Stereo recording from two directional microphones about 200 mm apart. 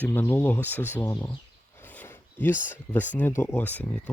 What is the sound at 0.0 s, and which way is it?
Speech, 10° left (ahead or behind).